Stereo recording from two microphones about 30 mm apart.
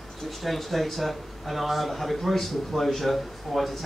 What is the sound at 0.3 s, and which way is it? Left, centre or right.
Speech, centre.